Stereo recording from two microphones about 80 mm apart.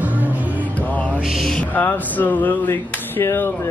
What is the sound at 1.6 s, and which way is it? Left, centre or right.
Speech, left.